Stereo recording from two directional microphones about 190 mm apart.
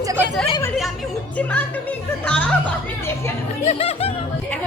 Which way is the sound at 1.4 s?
10° left (ahead or behind).